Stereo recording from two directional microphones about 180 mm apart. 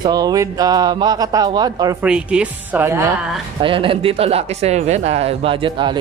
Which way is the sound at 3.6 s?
30° right (ahead or behind).